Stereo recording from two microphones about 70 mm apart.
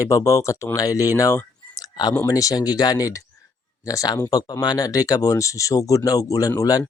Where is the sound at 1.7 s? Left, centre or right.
Left.